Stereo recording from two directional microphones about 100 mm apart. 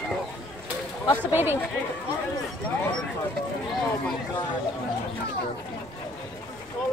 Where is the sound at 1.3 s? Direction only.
20° right (ahead or behind).